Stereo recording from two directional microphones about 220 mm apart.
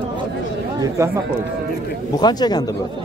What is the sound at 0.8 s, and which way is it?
Speech, 15° right (ahead or behind).